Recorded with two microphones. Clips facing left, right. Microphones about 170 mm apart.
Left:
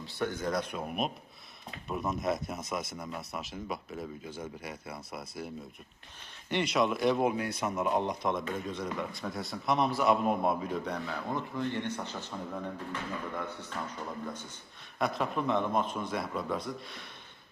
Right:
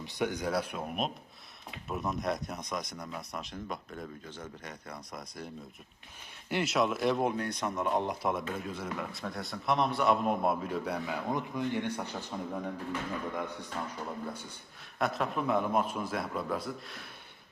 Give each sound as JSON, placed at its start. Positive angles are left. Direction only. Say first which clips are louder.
{"t": 0.0, "sound": "speech", "louder": "right 1 dB", "side_deg": -15}
{"t": 6.5, "sound": "speech", "louder": "left 1 dB", "side_deg": -5}
{"t": 14.9, "sound": "speech", "louder": "even", "side_deg": 0}